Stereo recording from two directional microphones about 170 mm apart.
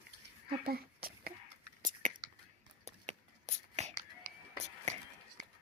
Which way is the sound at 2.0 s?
50° right (ahead or behind).